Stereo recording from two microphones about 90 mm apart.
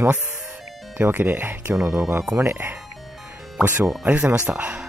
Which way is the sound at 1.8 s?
35° right (ahead or behind).